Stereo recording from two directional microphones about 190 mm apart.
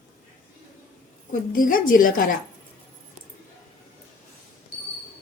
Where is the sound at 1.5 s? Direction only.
45° left (ahead or behind).